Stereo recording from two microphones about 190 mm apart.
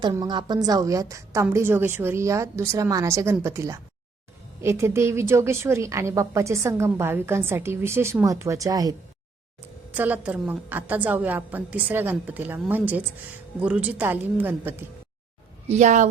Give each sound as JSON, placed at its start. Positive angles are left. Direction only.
{"t": 0.0, "sound": "a woman's voice", "side_deg": -20}
{"t": 9.9, "sound": "a woman's voice", "side_deg": -10}
{"t": 15.7, "sound": "a woman's voice", "side_deg": -40}